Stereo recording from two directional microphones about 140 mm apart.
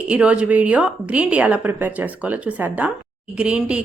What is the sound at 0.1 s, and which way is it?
A woman's voice, 10° right (ahead or behind).